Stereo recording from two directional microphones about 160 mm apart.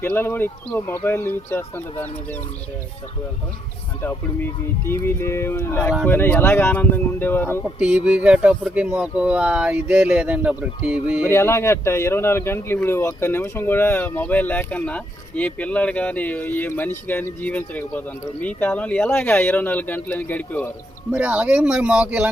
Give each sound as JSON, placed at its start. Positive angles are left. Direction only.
{"t": 0.0, "sound": "speech", "side_deg": 15}
{"t": 4.9, "sound": "speech", "side_deg": 15}
{"t": 7.8, "sound": "speech", "side_deg": -5}
{"t": 11.2, "sound": "speech", "side_deg": 15}
{"t": 21.1, "sound": "speech", "side_deg": -10}